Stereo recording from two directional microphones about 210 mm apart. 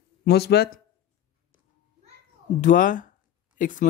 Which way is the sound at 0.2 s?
50° left (ahead or behind).